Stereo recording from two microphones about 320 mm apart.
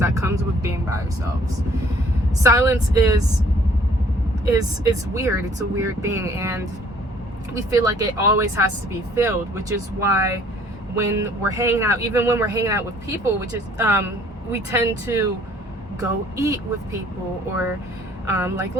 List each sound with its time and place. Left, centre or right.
0.0 s speech: centre
2.4 s speech: centre
4.5 s speech: centre
7.7 s speech: centre